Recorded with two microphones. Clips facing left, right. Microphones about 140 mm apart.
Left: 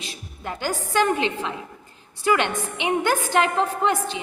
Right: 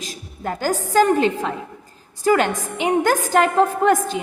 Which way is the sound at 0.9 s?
40° right (ahead or behind).